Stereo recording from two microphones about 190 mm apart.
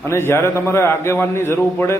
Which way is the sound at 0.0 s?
10° left (ahead or behind).